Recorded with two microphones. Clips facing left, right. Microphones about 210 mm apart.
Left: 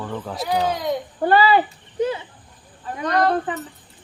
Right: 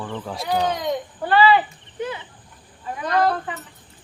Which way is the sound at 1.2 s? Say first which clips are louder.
Left 1 dB; 40° left (ahead or behind).